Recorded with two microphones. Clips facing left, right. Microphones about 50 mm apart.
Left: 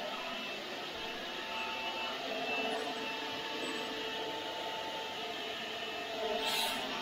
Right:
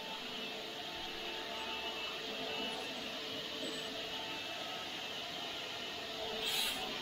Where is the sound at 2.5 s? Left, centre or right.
Left.